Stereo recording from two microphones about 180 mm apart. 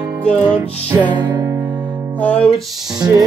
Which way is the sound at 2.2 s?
5° left (ahead or behind).